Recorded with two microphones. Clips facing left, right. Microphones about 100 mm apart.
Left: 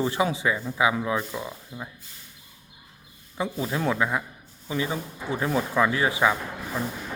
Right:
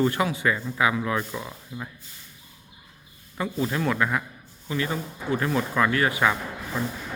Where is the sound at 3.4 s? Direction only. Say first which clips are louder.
Right 1 dB; 15° left (ahead or behind).